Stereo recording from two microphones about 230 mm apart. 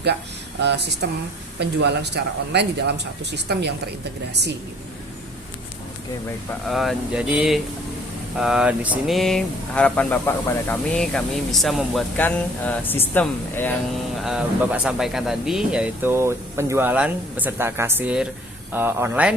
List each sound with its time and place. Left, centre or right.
0.6 s speech: right
6.7 s speech: centre
14.2 s speech: centre